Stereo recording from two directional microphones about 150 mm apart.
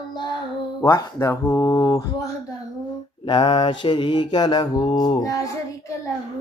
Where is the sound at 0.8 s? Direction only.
20° left (ahead or behind).